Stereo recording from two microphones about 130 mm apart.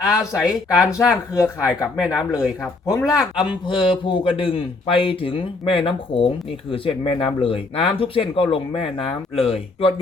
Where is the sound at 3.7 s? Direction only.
40° left (ahead or behind).